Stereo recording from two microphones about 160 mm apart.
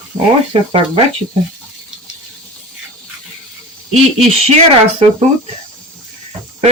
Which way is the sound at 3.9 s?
40° right (ahead or behind).